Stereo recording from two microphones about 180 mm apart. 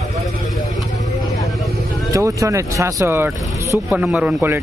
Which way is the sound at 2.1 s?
20° right (ahead or behind).